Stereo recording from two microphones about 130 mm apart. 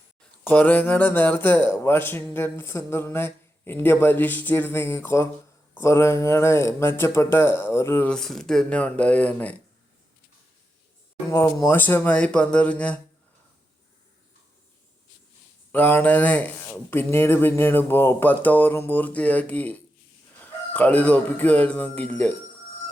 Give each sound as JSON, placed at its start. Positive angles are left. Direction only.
{"t": 0.2, "sound": "speech", "side_deg": 15}
{"t": 8.1, "sound": "speech", "side_deg": 5}
{"t": 11.3, "sound": "speech", "side_deg": 20}
{"t": 15.7, "sound": "speech", "side_deg": 10}